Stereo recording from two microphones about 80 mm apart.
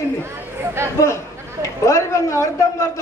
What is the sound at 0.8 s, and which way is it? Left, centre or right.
Speech, right.